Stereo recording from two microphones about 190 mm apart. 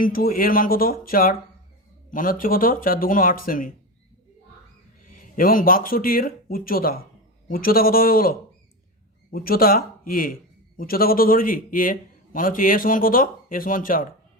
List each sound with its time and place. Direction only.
0.0 s a man's voice: 50° left (ahead or behind)
5.0 s a man's voice: 45° left (ahead or behind)